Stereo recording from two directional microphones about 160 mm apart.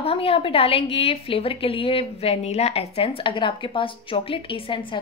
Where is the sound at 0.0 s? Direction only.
35° left (ahead or behind).